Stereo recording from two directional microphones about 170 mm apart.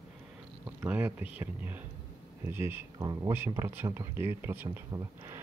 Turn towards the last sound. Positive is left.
turn(degrees=-15)  # may be behind; listen again after turning